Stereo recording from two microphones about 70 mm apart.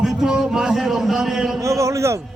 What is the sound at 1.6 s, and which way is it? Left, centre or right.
Speech, right.